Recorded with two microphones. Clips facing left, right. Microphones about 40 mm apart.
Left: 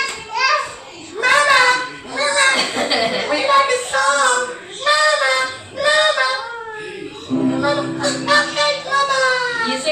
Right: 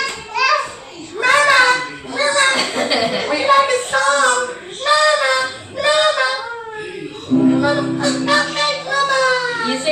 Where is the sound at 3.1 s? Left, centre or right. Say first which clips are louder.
Even; left.